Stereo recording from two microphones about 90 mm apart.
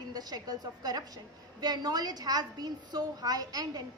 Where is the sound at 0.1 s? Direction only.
45° right (ahead or behind).